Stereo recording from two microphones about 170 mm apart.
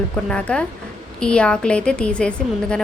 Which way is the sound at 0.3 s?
5° left (ahead or behind).